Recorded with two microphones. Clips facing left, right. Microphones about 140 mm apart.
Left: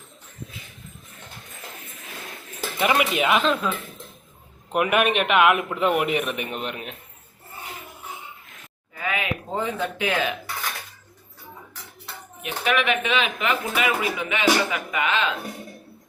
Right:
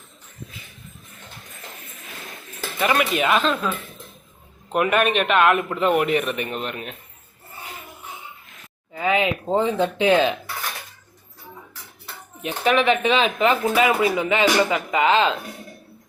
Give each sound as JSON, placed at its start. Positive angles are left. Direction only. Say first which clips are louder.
{"t": 2.9, "sound": "a man's voice", "louder": "right 1 dB", "side_deg": 15}
{"t": 4.7, "sound": "a man's voice", "louder": "right 1 dB", "side_deg": 10}
{"t": 9.0, "sound": "speech", "louder": "right 7 dB", "side_deg": -25}
{"t": 12.4, "sound": "speech", "louder": "right 4 dB", "side_deg": -30}